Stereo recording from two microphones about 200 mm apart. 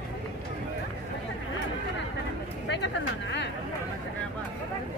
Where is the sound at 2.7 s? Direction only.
60° left (ahead or behind).